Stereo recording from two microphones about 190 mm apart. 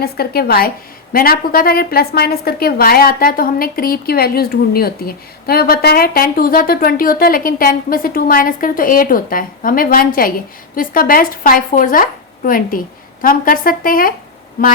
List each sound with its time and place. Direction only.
0.0 s a woman's voice: 55° left (ahead or behind)